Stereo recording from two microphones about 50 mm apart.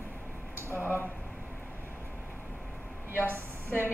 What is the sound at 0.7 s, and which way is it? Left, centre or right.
Speech, left.